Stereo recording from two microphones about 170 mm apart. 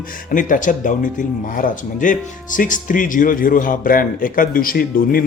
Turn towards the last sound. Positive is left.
turn(degrees=60)  # may be behind; listen again after turning